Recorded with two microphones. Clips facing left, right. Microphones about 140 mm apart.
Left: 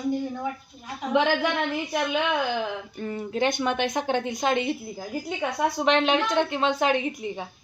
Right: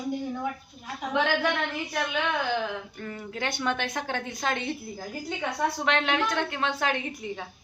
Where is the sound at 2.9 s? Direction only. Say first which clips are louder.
Left 7 dB; 25° left (ahead or behind).